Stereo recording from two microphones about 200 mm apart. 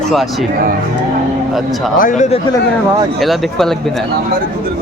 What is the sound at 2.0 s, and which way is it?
Speech, 40° left (ahead or behind).